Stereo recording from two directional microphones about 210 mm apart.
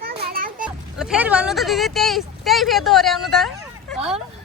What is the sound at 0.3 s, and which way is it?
Children playing, 45° right (ahead or behind).